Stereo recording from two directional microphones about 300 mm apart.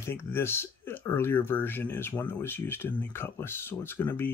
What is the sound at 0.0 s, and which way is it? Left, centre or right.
Speech, centre.